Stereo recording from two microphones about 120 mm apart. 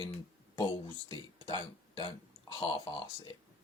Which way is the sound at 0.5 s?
35° left (ahead or behind).